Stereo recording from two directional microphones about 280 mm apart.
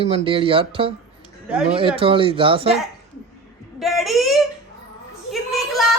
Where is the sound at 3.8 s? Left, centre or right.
Centre.